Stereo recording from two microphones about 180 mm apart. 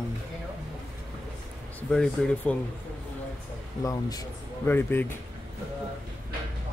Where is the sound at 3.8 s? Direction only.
20° left (ahead or behind).